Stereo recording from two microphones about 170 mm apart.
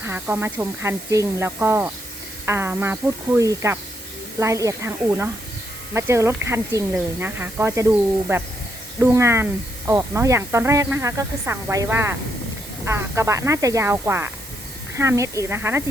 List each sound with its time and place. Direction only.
0.0 s speech: 10° right (ahead or behind)